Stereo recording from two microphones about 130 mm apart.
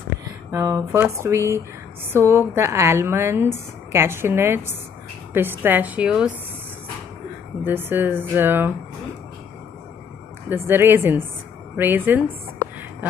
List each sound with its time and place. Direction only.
0.2 s a woman's voice: 20° right (ahead or behind)
7.6 s speech: 15° right (ahead or behind)
10.5 s a woman's voice: 15° right (ahead or behind)